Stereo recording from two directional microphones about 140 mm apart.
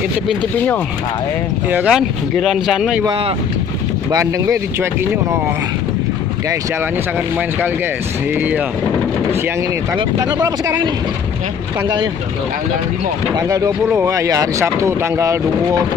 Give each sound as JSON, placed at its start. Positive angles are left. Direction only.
{"t": 1.7, "sound": "speech", "side_deg": -5}
{"t": 4.1, "sound": "speech", "side_deg": -25}
{"t": 8.4, "sound": "speech", "side_deg": -10}
{"t": 9.9, "sound": "speech", "side_deg": -30}
{"t": 13.3, "sound": "speech", "side_deg": -25}